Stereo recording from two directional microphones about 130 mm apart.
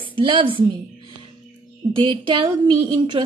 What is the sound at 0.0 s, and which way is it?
Speech, 40° right (ahead or behind).